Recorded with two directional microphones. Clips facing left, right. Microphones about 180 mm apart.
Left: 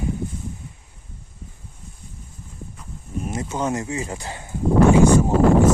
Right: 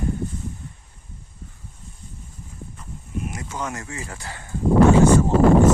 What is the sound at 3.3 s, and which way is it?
Speech, 25° left (ahead or behind).